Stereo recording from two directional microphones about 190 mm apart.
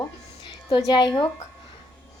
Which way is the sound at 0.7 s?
20° left (ahead or behind).